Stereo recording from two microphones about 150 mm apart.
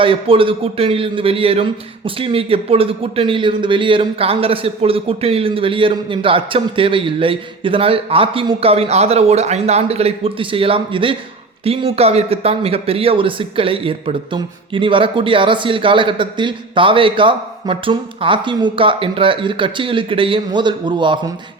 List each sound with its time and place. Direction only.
0.0 s speech: 35° right (ahead or behind)